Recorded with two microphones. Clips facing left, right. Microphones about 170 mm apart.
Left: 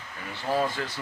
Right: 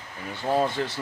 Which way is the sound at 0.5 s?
25° right (ahead or behind).